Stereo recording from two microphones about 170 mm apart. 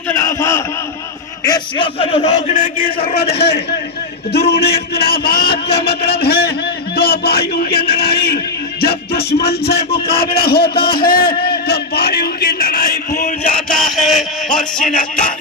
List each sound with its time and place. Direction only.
0.1 s battle cry: 15° left (ahead or behind)
1.5 s speech: 25° left (ahead or behind); by 2.6 s 40° left (ahead or behind)
4.3 s music: 70° left (ahead or behind)
5.7 s a man's voice: 70° left (ahead or behind)
6.9 s a sound: 70° left (ahead or behind)
8.8 s music: 70° left (ahead or behind)
11.0 s a man's voice: 60° left (ahead or behind)
13.7 s music: 5° left (ahead or behind)
14.8 s speech: 55° left (ahead or behind)